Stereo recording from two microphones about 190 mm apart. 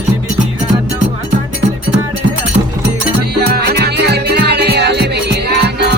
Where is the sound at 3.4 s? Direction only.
60° right (ahead or behind).